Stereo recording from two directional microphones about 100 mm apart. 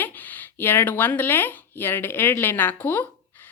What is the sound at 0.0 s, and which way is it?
A woman's voice, 20° left (ahead or behind).